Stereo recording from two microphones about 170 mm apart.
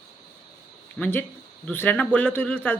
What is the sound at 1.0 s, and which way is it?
Speech, 10° left (ahead or behind).